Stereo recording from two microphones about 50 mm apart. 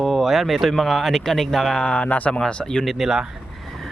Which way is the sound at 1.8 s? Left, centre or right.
Left.